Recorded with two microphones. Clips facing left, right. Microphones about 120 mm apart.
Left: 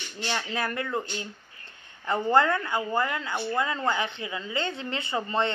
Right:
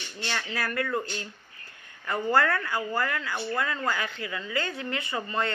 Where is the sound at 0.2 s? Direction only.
25° left (ahead or behind).